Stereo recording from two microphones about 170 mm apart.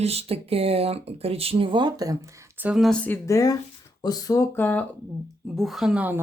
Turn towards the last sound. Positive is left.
turn(degrees=-10)  # may be behind; listen again after turning